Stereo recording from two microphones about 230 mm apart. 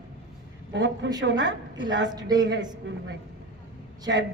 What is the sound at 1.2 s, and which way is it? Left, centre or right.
A woman's voice, right.